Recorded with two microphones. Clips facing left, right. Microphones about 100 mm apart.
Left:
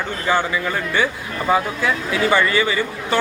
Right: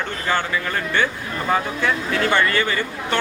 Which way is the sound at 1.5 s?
10° left (ahead or behind).